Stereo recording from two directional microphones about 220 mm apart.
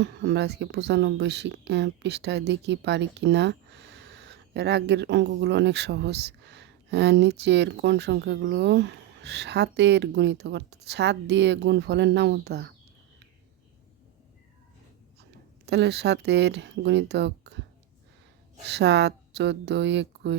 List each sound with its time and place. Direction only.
0.0 s speech: 50° right (ahead or behind)
15.6 s speech: 50° right (ahead or behind)
18.7 s speech: 50° right (ahead or behind)